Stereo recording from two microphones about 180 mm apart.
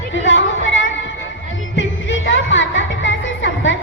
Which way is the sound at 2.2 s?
90° left.